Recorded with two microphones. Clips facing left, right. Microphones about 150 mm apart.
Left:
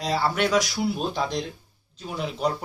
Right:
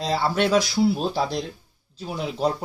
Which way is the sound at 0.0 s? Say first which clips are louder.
Right 2 dB; 25° right (ahead or behind).